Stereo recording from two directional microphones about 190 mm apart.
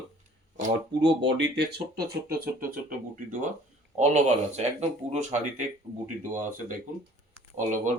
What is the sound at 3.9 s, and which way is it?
Speech, 35° right (ahead or behind).